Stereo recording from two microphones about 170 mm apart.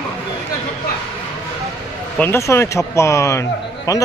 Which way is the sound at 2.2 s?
15° left (ahead or behind).